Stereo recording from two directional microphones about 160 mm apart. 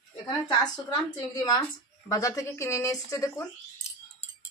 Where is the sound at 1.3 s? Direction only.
25° left (ahead or behind).